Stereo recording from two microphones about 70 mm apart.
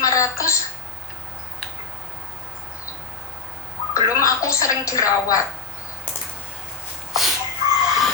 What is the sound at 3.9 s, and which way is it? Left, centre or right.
Speech, left.